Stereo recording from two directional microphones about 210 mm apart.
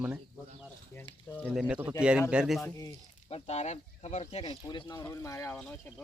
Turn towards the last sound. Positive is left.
turn(degrees=10)  # may be behind; listen again after turning